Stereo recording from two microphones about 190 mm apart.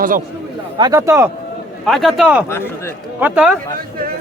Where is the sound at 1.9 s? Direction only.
Centre (ahead or behind).